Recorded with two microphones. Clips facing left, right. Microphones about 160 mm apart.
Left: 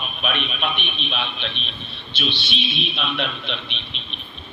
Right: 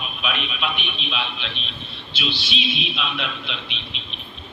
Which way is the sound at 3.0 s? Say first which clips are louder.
Left 2 dB; 40° left (ahead or behind).